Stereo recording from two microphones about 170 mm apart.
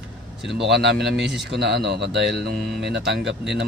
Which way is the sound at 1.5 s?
90° right.